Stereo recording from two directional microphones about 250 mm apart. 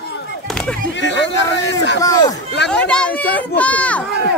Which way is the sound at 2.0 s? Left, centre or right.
Centre.